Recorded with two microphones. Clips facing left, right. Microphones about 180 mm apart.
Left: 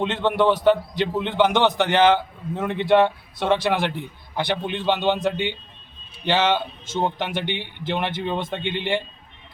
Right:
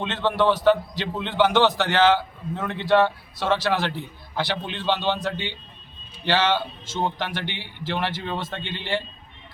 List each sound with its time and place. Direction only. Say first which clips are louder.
0.0 s a man's voice: left 2 dB; 20° left (ahead or behind)